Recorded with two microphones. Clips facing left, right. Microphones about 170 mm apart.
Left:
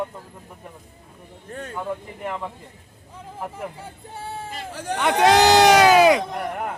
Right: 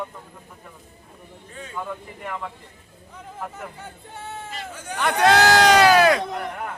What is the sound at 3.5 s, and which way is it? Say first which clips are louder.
Speech: left 3 dB; 30° left (ahead or behind).